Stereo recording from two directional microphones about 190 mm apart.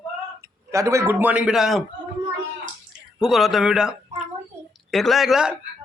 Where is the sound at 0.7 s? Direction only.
15° right (ahead or behind).